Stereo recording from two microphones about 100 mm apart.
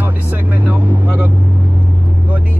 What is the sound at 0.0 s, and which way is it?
Music, 15° right (ahead or behind).